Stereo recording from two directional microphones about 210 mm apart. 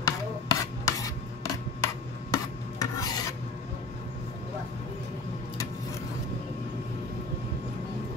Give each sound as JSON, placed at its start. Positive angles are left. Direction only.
{"t": 0.0, "sound": "rub", "side_deg": 15}
{"t": 2.3, "sound": "filing", "side_deg": 15}